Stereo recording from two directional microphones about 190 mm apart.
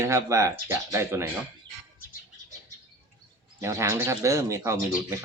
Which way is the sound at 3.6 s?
15° right (ahead or behind).